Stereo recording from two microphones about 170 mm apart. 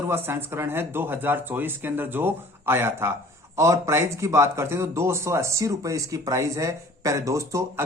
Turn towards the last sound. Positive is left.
turn(degrees=-20)  # may be behind; listen again after turning